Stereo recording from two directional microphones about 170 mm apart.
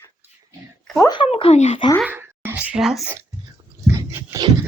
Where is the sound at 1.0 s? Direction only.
30° left (ahead or behind).